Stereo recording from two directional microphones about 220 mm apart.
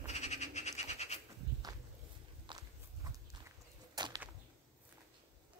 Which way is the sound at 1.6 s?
15° right (ahead or behind).